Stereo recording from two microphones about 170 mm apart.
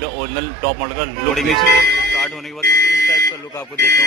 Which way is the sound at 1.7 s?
70° right (ahead or behind).